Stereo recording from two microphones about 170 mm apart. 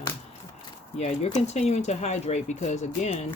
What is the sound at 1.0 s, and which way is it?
Speech, 40° left (ahead or behind).